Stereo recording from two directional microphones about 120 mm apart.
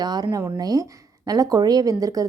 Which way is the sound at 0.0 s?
35° right (ahead or behind).